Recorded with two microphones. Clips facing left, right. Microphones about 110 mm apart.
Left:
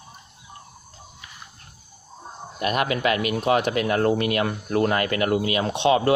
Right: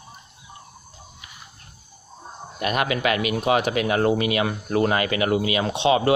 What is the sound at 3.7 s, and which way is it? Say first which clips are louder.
Speech: even; 60° right (ahead or behind).